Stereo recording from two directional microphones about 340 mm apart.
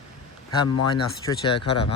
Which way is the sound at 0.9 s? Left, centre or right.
Centre.